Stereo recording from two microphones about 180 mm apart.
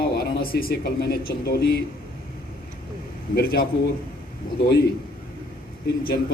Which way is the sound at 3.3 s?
55° left (ahead or behind).